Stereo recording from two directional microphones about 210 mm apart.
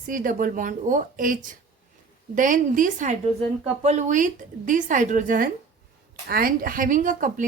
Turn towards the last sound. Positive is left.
turn(degrees=-40)  # may be behind; listen again after turning